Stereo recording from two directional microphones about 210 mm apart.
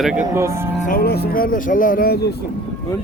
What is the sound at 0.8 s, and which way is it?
Speech, 45° left (ahead or behind).